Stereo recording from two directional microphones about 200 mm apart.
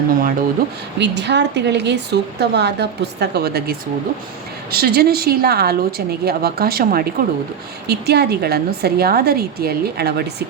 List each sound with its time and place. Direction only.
0.1 s a woman's voice: 45° right (ahead or behind)
0.9 s a woman's voice: 60° right (ahead or behind)